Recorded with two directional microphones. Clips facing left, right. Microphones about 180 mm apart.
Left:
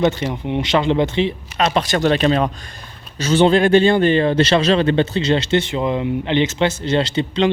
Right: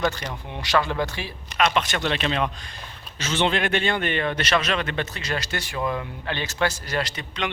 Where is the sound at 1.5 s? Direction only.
35° left (ahead or behind).